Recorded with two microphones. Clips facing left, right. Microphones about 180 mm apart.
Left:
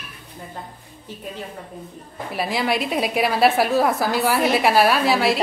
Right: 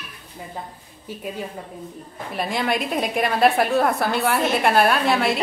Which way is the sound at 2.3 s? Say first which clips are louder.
Left 1 dB; 5° left (ahead or behind).